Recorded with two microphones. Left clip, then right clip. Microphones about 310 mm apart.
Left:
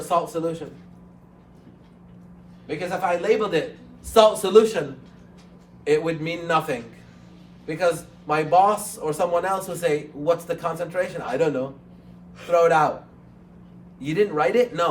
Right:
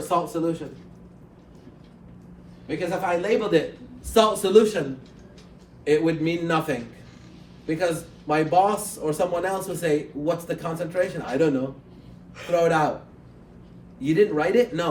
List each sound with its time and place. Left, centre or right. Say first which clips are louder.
0.1 s a man's voice: left 1 dB; centre
2.6 s a man's voice: left 1 dB; centre
5.8 s a man's voice: right 1 dB; centre
14.0 s a man's voice: even; centre